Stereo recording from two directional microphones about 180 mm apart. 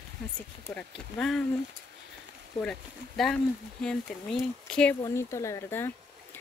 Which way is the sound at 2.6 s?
5° left (ahead or behind).